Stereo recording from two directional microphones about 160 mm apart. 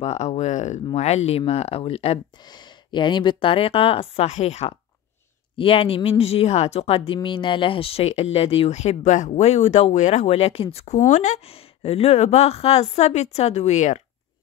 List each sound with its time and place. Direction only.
0.0 s a woman's voice: 45° left (ahead or behind)
2.4 s speech: 25° left (ahead or behind)
11.1 s a woman's voice: 50° left (ahead or behind)